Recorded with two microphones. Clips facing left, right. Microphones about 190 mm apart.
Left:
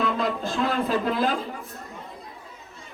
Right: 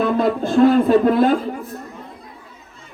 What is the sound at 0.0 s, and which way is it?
Speech, 55° right (ahead or behind).